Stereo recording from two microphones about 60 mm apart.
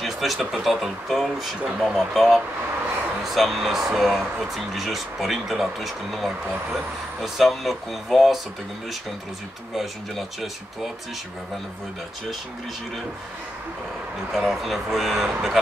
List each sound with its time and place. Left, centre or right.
0.0 s speech: centre
9.8 s speech: centre
14.3 s speech: centre